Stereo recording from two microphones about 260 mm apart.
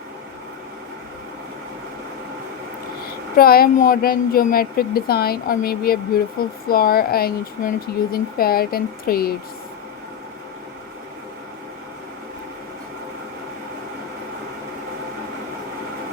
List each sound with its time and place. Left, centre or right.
3.3 s a woman's voice: left